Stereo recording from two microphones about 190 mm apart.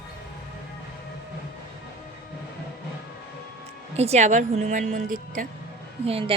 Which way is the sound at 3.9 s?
35° right (ahead or behind).